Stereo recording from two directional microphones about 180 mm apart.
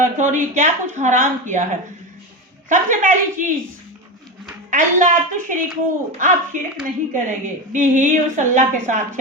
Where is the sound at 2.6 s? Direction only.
45° right (ahead or behind).